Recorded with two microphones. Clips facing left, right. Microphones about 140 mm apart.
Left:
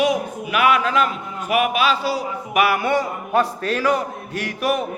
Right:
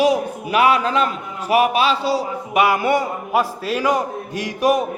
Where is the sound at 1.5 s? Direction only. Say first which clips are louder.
Right 3 dB; 30° right (ahead or behind).